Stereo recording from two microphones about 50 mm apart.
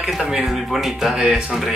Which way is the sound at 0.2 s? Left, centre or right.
Centre.